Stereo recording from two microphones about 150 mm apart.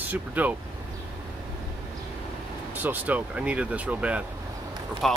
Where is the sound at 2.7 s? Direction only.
10° right (ahead or behind).